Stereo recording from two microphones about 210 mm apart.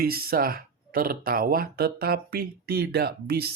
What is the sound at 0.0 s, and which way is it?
Speech, 45° right (ahead or behind).